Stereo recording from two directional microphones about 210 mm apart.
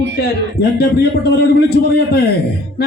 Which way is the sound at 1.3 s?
50° left (ahead or behind).